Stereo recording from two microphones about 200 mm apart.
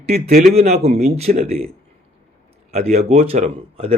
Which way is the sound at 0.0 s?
35° right (ahead or behind).